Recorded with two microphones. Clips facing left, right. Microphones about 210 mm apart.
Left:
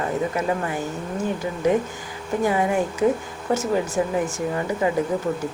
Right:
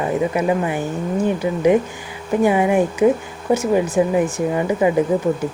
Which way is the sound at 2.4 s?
15° right (ahead or behind).